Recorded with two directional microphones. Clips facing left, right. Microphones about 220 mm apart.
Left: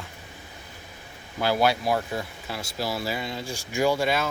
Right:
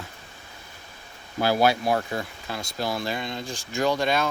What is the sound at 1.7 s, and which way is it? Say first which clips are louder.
Speech: right 1 dB; centre (ahead or behind).